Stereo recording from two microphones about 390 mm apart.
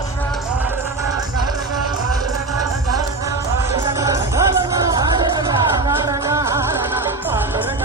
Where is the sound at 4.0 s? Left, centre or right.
Centre.